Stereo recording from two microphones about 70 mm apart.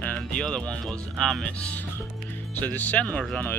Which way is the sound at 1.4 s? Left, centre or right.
Centre.